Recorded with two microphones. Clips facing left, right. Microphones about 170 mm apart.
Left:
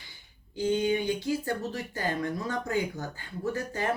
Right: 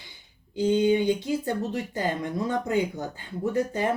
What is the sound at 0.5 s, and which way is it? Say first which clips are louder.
Speech: right 5 dB; 20° right (ahead or behind).